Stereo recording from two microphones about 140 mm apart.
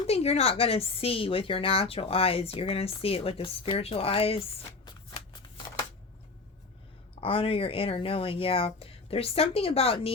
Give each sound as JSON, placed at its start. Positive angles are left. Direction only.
{"t": 0.1, "sound": "a woman's voice", "side_deg": 45}
{"t": 7.2, "sound": "speech", "side_deg": 40}